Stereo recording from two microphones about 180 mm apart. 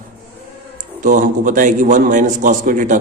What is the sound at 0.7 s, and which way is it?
A man's voice, 45° right (ahead or behind).